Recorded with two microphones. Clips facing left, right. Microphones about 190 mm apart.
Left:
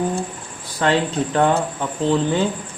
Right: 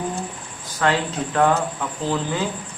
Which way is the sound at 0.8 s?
30° left (ahead or behind).